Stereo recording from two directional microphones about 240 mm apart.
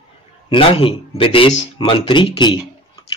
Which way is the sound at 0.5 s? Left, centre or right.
Left.